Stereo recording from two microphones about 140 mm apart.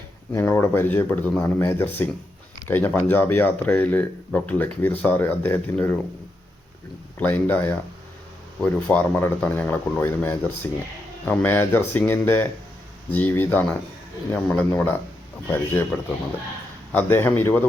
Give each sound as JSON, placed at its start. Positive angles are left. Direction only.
{"t": 0.3, "sound": "speech", "side_deg": 20}
{"t": 7.2, "sound": "speech", "side_deg": 15}